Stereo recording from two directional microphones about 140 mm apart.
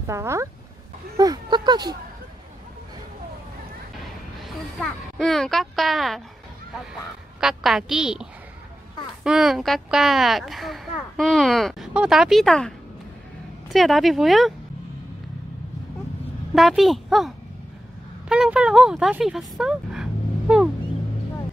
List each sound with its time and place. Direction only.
0.0 s speech: 20° right (ahead or behind)
4.4 s speech: centre (ahead or behind)
16.5 s speech: centre (ahead or behind)
18.3 s speech: 5° right (ahead or behind)